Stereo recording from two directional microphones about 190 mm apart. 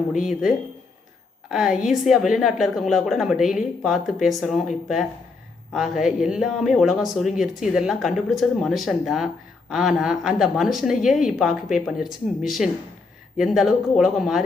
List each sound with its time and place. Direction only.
0.1 s speech: 40° left (ahead or behind)
1.5 s speech: centre (ahead or behind)
5.7 s speech: centre (ahead or behind)